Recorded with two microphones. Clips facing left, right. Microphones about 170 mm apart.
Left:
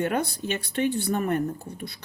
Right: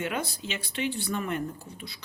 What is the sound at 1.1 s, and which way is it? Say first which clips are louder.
Speech: left 6 dB; 45° left (ahead or behind).